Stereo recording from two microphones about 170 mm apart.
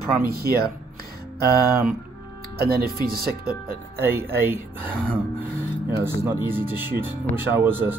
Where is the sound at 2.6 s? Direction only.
65° right (ahead or behind).